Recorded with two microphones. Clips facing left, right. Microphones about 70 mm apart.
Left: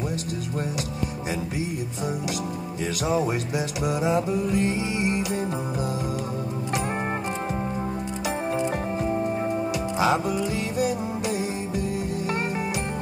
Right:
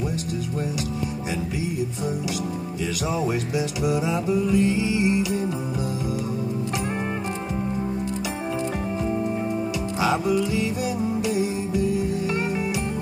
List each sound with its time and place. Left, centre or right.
3.1 s music: left
9.9 s music: left